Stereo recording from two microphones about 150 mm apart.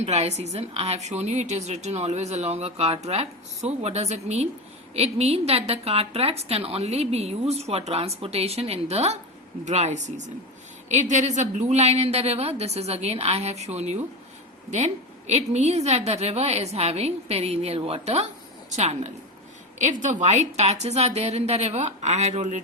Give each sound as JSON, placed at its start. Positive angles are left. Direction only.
{"t": 0.0, "sound": "a woman's voice", "side_deg": -45}